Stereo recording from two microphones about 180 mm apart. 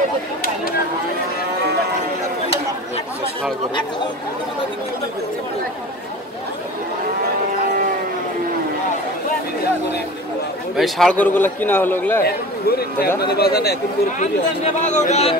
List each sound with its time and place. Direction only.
10.8 s a man's voice: 5° left (ahead or behind)
12.3 s a man's voice: 60° left (ahead or behind)
14.2 s speech: 40° left (ahead or behind)